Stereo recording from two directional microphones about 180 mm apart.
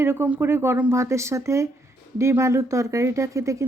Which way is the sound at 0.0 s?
15° right (ahead or behind).